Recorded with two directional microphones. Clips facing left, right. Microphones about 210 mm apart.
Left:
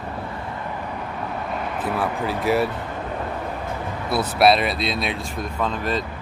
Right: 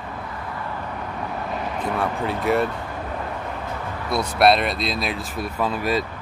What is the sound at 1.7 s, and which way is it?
Speech, 5° left (ahead or behind).